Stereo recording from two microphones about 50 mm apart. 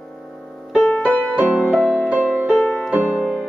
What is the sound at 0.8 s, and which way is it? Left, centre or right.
Music, left.